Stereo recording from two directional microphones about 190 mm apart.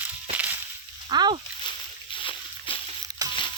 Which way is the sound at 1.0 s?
25° right (ahead or behind).